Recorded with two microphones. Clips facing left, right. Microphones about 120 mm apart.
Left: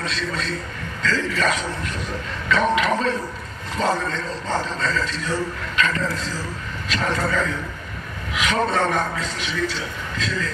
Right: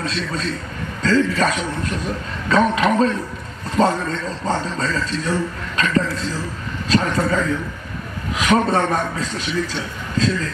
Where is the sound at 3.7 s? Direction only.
35° right (ahead or behind).